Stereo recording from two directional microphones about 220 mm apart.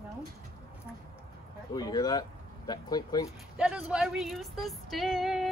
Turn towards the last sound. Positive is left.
turn(degrees=0)  # may be behind; listen again after turning